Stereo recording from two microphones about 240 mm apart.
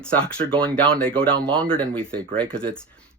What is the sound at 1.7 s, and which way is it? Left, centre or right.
Speech, centre.